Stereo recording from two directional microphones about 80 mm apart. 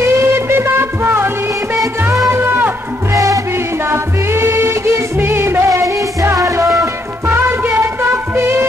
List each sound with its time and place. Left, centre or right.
0.0 s music of bollywood: right
2.0 s music: right
3.1 s music: right
3.9 s music: right
7.2 s music: right